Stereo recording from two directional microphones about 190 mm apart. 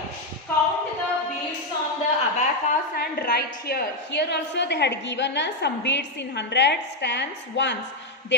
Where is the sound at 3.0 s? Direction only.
55° left (ahead or behind).